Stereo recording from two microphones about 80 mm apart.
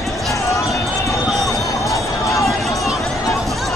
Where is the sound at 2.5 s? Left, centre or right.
Centre.